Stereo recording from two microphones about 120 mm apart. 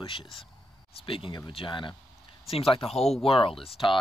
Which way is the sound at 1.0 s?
50° left (ahead or behind).